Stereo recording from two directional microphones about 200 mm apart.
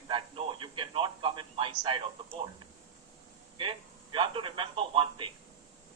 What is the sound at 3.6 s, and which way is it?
A man's voice, 25° right (ahead or behind).